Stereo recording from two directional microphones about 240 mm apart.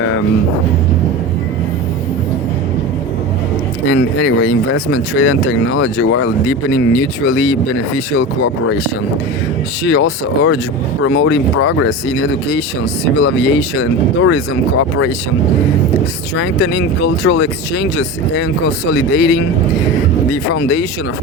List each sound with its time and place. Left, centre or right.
3.8 s speech: left
9.8 s speech: left
16.4 s speech: left